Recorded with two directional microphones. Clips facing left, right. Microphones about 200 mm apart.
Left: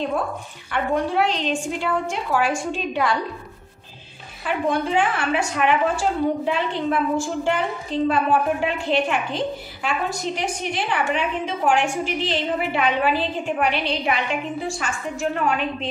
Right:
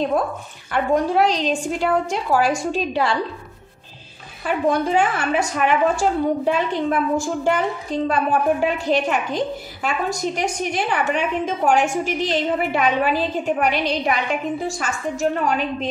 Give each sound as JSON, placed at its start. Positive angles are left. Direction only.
{"t": 0.7, "sound": "a woman's voice", "side_deg": -40}
{"t": 4.5, "sound": "a woman's voice", "side_deg": -40}